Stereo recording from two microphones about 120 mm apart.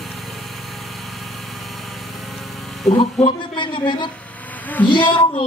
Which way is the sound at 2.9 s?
55° left (ahead or behind).